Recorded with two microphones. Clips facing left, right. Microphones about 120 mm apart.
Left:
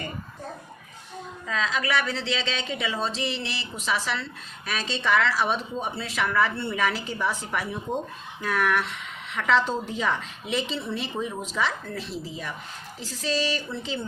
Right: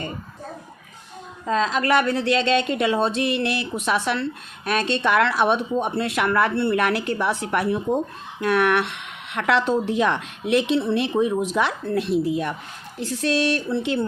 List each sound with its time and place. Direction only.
1.5 s speech: 45° right (ahead or behind); by 14.1 s 65° right (ahead or behind)